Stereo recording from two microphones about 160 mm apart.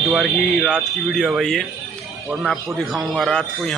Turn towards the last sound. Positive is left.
turn(degrees=0)  # may be behind; listen again after turning